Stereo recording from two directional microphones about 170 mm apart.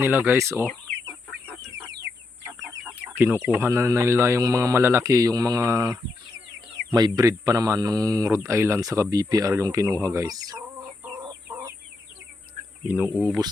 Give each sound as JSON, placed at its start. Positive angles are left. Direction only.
{"t": 0.0, "sound": "speech", "side_deg": -10}
{"t": 0.5, "sound": "speech", "side_deg": 10}
{"t": 3.2, "sound": "speech", "side_deg": -10}
{"t": 11.4, "sound": "chicken", "side_deg": -20}
{"t": 13.1, "sound": "speech", "side_deg": 10}